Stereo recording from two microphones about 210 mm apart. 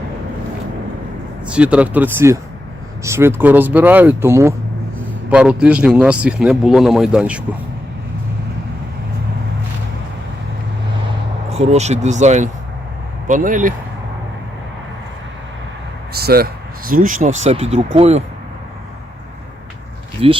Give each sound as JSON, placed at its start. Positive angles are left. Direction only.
{"t": 1.5, "sound": "speech", "side_deg": -5}
{"t": 11.5, "sound": "speech", "side_deg": -30}
{"t": 16.1, "sound": "speech", "side_deg": -45}
{"t": 20.2, "sound": "speech", "side_deg": -25}